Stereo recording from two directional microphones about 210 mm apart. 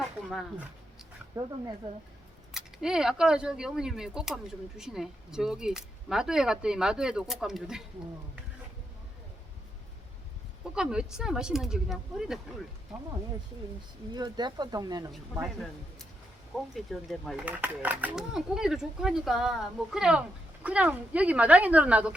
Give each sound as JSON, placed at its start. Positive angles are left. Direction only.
{"t": 1.4, "sound": "speech", "side_deg": -15}
{"t": 2.5, "sound": "speech", "side_deg": 0}
{"t": 10.8, "sound": "speech", "side_deg": -5}
{"t": 14.1, "sound": "speech", "side_deg": -20}
{"t": 15.4, "sound": "speech", "side_deg": 0}